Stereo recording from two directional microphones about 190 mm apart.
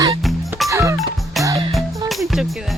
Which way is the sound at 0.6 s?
15° right (ahead or behind).